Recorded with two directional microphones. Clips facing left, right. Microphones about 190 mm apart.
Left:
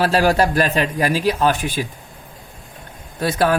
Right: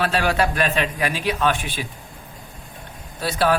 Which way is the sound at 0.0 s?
40° left (ahead or behind).